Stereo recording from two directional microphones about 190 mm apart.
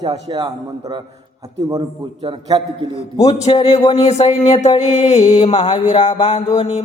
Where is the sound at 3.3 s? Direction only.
35° left (ahead or behind).